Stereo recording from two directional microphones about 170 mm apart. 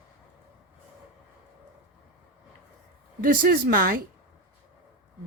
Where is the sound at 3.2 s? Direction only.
55° right (ahead or behind).